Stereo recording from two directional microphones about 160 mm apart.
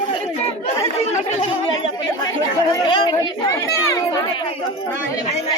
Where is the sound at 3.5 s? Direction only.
20° left (ahead or behind).